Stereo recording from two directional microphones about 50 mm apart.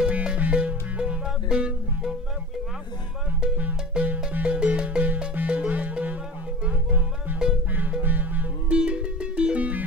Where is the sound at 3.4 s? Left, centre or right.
Centre; by 8.7 s right.